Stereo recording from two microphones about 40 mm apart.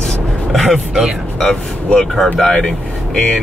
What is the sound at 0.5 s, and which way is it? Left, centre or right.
Speech, centre.